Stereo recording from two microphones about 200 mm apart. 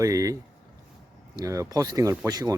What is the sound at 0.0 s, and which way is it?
Speech, 15° right (ahead or behind).